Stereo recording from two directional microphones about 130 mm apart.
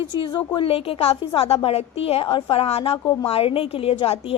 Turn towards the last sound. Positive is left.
turn(degrees=50)  # may be behind; listen again after turning